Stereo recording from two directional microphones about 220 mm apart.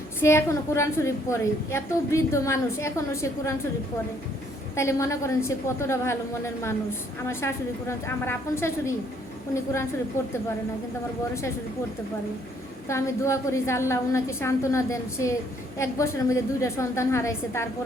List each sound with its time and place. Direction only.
0.2 s a woman's voice: 10° left (ahead or behind)
4.7 s a woman's voice: 15° left (ahead or behind)
12.9 s a woman's voice: 15° left (ahead or behind)